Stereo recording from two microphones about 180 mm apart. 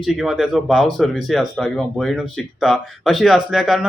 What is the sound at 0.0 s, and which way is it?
Speech, centre (ahead or behind).